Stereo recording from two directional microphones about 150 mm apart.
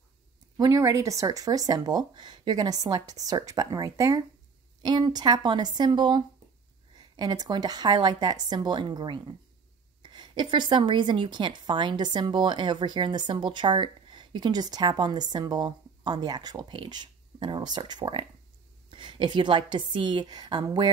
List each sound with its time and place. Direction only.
0.6 s a woman's voice: 25° right (ahead or behind)